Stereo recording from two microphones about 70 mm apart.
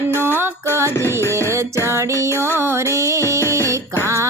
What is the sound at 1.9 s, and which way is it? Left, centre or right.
Music, right.